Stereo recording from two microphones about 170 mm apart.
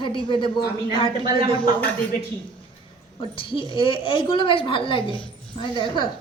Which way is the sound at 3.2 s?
30° left (ahead or behind).